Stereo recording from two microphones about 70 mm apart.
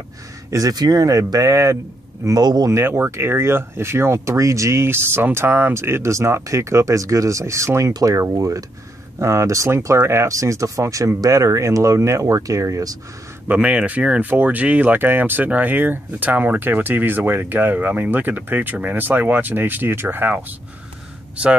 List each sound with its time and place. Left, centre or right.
0.5 s speech: right
2.2 s speech: right
2.7 s speech: right
9.2 s speech: right
13.5 s speech: centre